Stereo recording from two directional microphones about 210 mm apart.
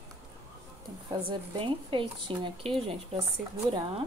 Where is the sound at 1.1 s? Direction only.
25° right (ahead or behind).